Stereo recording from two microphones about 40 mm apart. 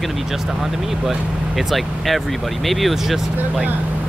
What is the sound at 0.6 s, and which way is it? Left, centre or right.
Speech, centre.